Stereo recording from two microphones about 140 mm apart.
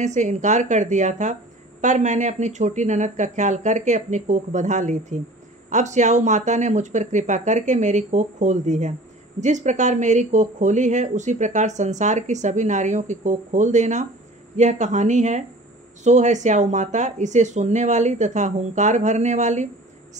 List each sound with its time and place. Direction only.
0.0 s speech: 55° right (ahead or behind)